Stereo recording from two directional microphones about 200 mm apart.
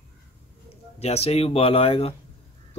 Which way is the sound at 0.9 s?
30° left (ahead or behind).